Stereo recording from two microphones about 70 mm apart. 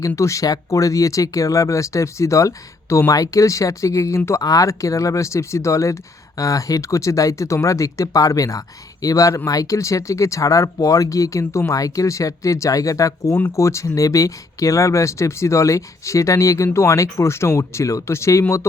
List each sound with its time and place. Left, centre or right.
0.0 s speech: left